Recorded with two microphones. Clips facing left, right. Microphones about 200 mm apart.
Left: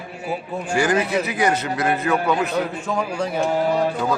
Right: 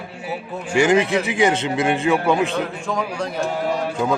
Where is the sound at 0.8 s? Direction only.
25° right (ahead or behind).